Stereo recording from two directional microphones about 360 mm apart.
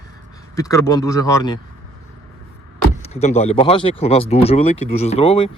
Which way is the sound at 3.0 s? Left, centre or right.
Centre.